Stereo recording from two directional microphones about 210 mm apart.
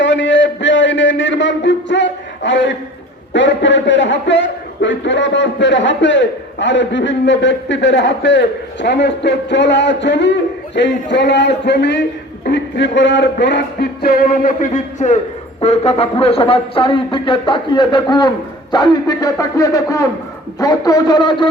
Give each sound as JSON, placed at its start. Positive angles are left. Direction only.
{"t": 0.0, "sound": "a sound", "side_deg": 60}
{"t": 3.3, "sound": "a man's voice", "side_deg": 60}
{"t": 12.5, "sound": "music", "side_deg": 55}
{"t": 15.6, "sound": "speech", "side_deg": 30}